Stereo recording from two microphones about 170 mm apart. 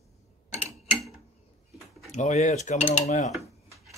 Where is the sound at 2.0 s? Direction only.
45° left (ahead or behind).